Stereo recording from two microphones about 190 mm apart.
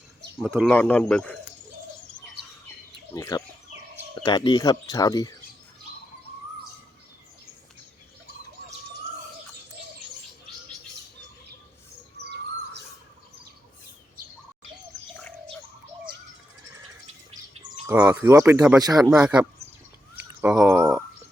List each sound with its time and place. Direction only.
0.4 s a man's voice: centre (ahead or behind)
3.2 s speech: 20° left (ahead or behind)
12.1 s bird: 60° right (ahead or behind)
17.8 s speech: 5° right (ahead or behind)
20.1 s a sound: 5° right (ahead or behind)